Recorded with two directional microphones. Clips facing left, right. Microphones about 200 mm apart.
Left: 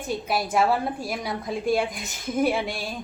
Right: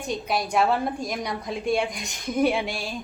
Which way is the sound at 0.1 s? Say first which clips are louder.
Even; 5° left (ahead or behind).